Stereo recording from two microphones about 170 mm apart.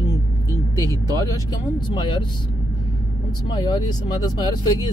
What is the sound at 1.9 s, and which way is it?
Speech, 30° left (ahead or behind).